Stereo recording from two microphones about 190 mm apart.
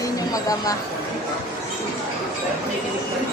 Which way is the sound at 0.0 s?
20° left (ahead or behind).